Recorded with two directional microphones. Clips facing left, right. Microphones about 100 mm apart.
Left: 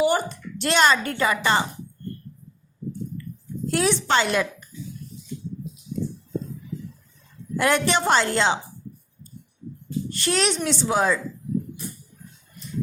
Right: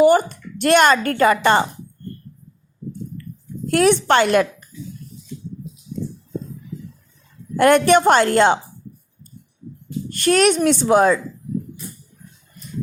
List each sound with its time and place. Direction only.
0.0 s a woman's voice: 50° right (ahead or behind)
3.7 s a woman's voice: 55° right (ahead or behind)
7.5 s a woman's voice: 55° right (ahead or behind)
10.1 s a woman's voice: 50° right (ahead or behind)